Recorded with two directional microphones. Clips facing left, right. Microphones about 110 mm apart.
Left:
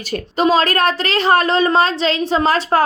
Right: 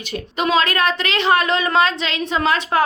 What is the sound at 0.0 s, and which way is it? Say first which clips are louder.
A woman's voice: left 5 dB; 35° left (ahead or behind).